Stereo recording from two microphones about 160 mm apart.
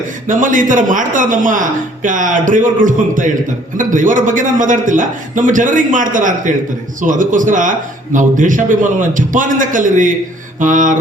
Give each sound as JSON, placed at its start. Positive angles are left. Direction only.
{"t": 0.3, "sound": "speech", "side_deg": -55}